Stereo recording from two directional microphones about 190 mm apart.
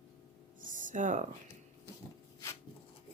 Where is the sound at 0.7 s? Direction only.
40° right (ahead or behind).